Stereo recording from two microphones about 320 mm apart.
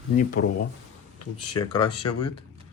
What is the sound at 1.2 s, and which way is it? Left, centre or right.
Speech, left.